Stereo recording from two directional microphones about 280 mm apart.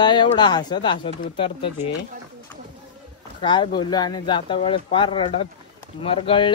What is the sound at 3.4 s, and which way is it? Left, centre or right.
Speech, centre.